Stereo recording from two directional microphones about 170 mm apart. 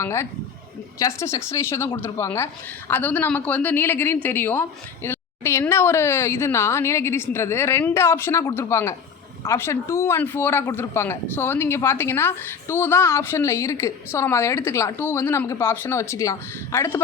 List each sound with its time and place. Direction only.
0.0 s speech: 15° left (ahead or behind)